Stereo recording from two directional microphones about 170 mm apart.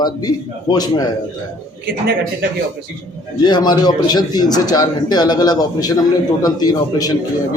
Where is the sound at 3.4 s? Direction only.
25° left (ahead or behind).